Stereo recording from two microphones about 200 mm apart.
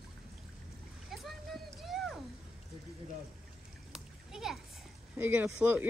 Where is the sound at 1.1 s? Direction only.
Centre (ahead or behind).